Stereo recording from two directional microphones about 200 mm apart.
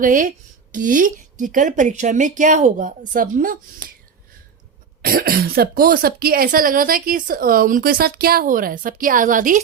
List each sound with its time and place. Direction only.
0.0 s a woman's voice: 40° right (ahead or behind)
5.0 s speech: 50° right (ahead or behind)